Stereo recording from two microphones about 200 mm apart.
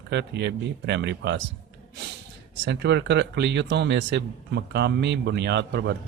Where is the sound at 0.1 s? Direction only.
60° right (ahead or behind).